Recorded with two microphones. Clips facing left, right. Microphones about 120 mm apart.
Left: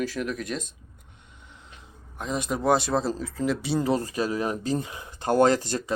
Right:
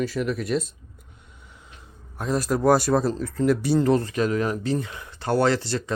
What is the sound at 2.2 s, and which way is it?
Speech, centre (ahead or behind).